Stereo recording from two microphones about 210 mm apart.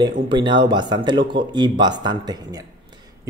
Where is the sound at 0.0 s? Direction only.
20° right (ahead or behind).